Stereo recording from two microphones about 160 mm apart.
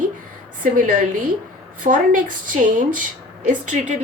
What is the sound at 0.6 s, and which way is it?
Speech, 55° right (ahead or behind).